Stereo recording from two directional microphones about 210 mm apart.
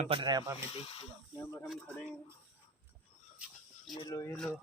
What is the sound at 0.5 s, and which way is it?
Speech, 25° left (ahead or behind).